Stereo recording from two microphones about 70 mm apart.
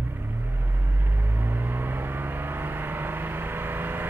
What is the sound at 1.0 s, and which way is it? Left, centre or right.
Vehicle, right.